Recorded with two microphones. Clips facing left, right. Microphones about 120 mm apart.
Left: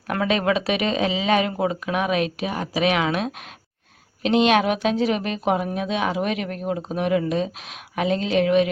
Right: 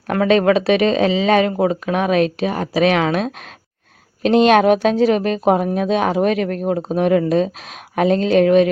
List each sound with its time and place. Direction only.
0.1 s a woman's voice: 35° right (ahead or behind)